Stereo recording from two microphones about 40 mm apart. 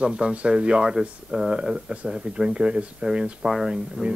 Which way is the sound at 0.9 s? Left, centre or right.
Centre.